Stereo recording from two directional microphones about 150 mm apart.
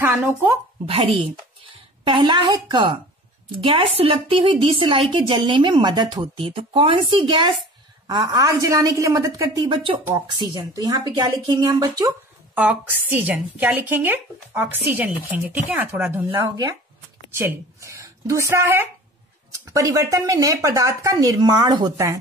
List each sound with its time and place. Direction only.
0.1 s speech: centre (ahead or behind)
0.8 s a woman's voice: 40° right (ahead or behind); by 9.6 s 20° right (ahead or behind)
9.6 s a woman's voice: 35° right (ahead or behind)
12.5 s a woman's voice: 10° right (ahead or behind)
17.4 s a woman's voice: 15° right (ahead or behind)